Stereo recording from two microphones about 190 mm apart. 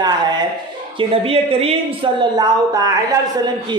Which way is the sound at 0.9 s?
30° right (ahead or behind).